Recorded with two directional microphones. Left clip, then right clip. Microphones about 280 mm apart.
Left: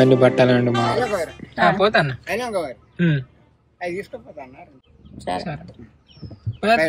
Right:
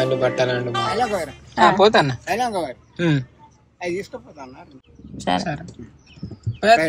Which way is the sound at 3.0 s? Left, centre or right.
Right.